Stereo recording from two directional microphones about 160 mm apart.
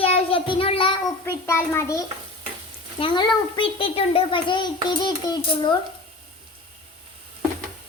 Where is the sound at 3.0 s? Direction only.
30° left (ahead or behind).